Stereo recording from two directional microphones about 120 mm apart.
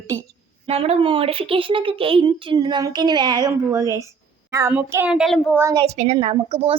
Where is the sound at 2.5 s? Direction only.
35° right (ahead or behind).